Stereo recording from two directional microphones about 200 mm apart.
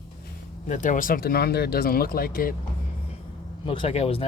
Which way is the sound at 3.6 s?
25° left (ahead or behind).